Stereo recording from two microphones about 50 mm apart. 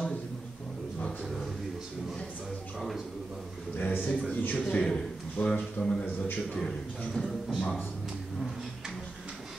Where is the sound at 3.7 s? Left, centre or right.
Left.